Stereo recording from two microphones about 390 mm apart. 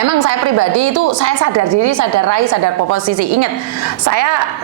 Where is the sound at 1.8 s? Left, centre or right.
Right.